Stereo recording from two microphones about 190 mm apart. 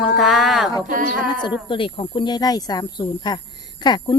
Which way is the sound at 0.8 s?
45° right (ahead or behind).